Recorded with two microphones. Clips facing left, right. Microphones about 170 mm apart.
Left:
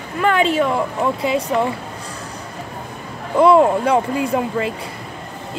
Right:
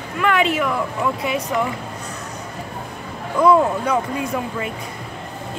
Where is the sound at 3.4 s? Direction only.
30° left (ahead or behind).